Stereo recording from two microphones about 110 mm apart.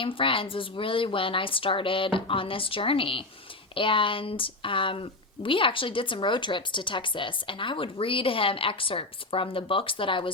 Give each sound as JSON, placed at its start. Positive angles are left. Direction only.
{"t": 0.0, "sound": "speech", "side_deg": 50}